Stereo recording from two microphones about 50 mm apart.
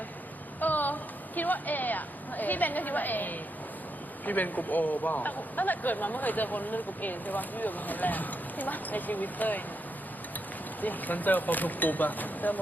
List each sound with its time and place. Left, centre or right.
0.6 s a sound: left
1.4 s a man's voice: left
10.8 s a man's voice: left